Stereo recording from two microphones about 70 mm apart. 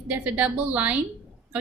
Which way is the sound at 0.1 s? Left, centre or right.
Centre.